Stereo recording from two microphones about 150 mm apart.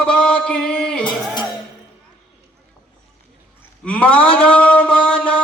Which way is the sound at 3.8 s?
10° left (ahead or behind).